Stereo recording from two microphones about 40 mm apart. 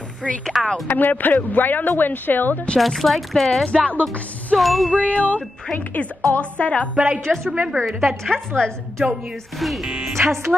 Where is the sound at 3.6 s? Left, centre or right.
Left.